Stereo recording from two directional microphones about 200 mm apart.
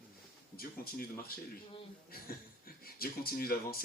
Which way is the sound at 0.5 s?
50° left (ahead or behind).